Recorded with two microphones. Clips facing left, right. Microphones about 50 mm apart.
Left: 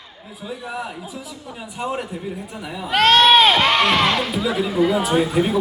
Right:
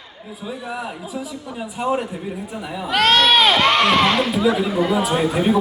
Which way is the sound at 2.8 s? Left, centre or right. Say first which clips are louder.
Left 2 dB; left.